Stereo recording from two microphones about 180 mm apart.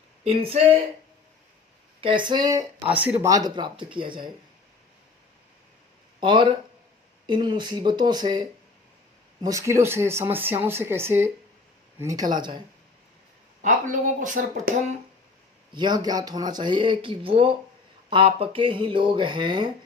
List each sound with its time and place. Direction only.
0.3 s speech: 30° right (ahead or behind)
2.0 s speech: 30° right (ahead or behind)
6.1 s speech: 25° right (ahead or behind)
13.6 s speech: 45° right (ahead or behind)
15.7 s speech: 25° right (ahead or behind)